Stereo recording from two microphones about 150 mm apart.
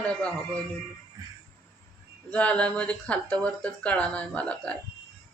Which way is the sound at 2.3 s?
10° left (ahead or behind).